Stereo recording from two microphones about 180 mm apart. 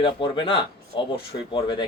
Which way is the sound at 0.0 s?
30° left (ahead or behind).